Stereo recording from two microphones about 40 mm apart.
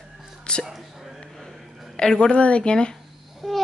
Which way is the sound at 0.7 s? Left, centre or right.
Centre.